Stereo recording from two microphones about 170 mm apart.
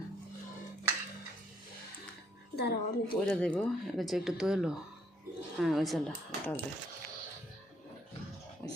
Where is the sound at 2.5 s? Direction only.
70° left (ahead or behind).